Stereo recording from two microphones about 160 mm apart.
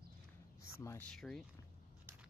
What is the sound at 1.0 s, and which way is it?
Speech, 5° left (ahead or behind).